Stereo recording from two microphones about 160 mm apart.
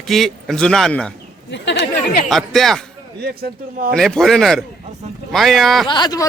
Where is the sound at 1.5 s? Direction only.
90° left.